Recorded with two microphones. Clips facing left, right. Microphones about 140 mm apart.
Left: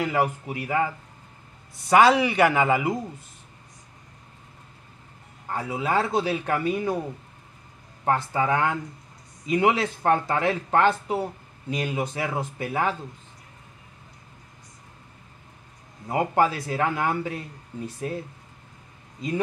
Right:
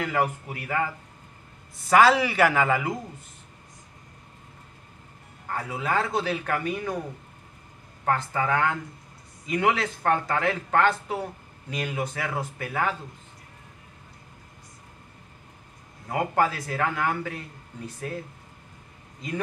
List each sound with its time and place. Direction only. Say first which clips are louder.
0.0 s speech: left 2 dB; 15° left (ahead or behind)
1.9 s a man's voice: left 1 dB; centre (ahead or behind)
2.7 s speech: left 3 dB; 20° left (ahead or behind)
5.5 s speech: left 2 dB; 15° left (ahead or behind)
6.6 s speech: left 4 dB; 30° left (ahead or behind)
8.0 s speech: left 2 dB; 20° left (ahead or behind)
16.1 s speech: left 2 dB; 15° left (ahead or behind)
17.7 s speech: left 5 dB; 10° left (ahead or behind)